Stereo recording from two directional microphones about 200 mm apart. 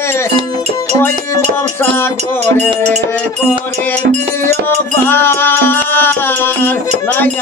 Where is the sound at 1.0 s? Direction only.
10° left (ahead or behind).